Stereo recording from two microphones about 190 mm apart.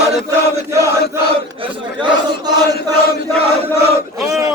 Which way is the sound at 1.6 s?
25° right (ahead or behind).